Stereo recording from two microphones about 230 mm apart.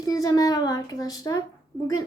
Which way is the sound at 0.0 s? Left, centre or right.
Centre.